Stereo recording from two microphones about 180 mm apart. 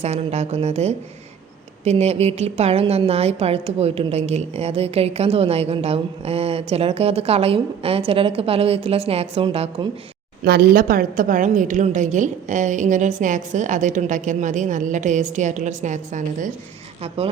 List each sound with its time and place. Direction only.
0.0 s a woman's voice: 35° right (ahead or behind)
10.4 s a woman's voice: 60° right (ahead or behind); by 16.5 s 45° right (ahead or behind)